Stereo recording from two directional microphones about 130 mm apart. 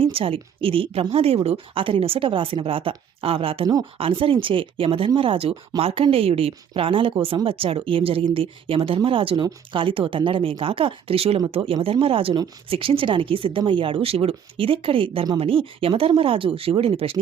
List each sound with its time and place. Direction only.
0.0 s speech: 45° right (ahead or behind)